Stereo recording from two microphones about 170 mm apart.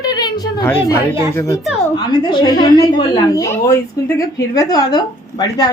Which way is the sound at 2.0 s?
30° left (ahead or behind).